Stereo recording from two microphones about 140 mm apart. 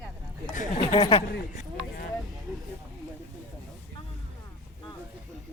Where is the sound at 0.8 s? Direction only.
35° left (ahead or behind).